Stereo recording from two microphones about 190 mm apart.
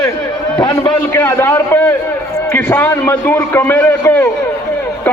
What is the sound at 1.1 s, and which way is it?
A man's voice, 10° left (ahead or behind).